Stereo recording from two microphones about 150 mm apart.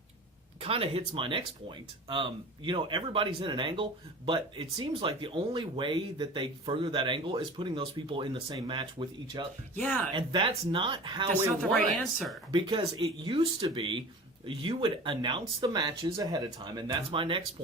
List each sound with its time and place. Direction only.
0.6 s speech: 40° right (ahead or behind)
9.7 s speech: 10° left (ahead or behind)
10.1 s speech: 35° right (ahead or behind)
12.5 s speech: 35° right (ahead or behind)